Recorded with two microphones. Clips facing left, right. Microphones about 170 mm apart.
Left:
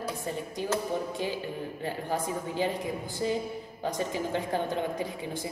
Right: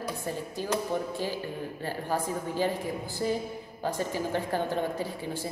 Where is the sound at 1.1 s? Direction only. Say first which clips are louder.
Even; 20° left (ahead or behind).